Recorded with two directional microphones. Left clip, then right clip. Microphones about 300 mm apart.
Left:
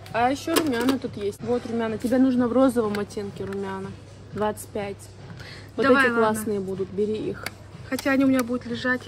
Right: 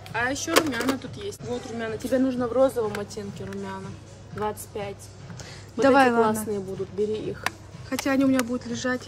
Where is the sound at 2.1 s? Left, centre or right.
Centre.